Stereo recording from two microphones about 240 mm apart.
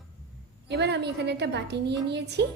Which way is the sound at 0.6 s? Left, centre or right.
Right.